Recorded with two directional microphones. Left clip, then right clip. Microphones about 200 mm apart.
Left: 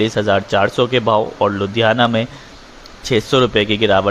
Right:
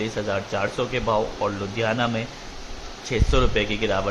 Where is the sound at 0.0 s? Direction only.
40° left (ahead or behind).